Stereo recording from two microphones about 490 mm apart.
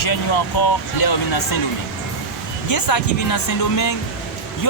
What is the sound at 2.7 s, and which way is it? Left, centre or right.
Speech, left.